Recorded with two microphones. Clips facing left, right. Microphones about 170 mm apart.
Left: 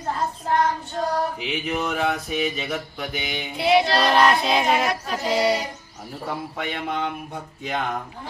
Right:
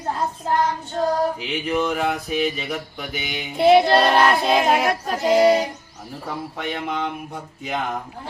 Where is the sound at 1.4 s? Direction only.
Centre (ahead or behind).